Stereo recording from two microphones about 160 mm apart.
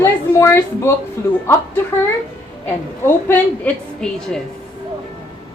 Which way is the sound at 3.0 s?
10° left (ahead or behind).